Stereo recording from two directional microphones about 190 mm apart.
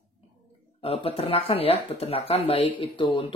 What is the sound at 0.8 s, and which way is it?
Speech, 30° left (ahead or behind).